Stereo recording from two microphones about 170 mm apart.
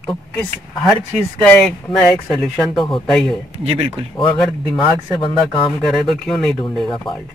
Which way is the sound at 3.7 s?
35° right (ahead or behind).